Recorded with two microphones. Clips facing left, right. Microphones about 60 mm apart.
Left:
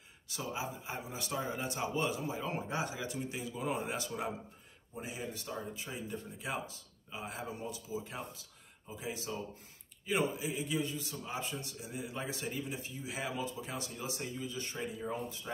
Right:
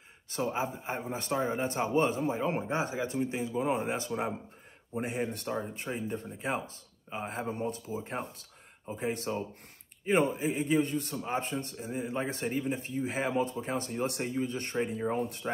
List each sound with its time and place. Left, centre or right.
0.3 s a man's voice: right
4.9 s a man's voice: right